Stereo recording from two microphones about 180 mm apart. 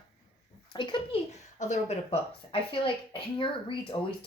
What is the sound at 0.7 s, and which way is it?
Speech, 25° left (ahead or behind).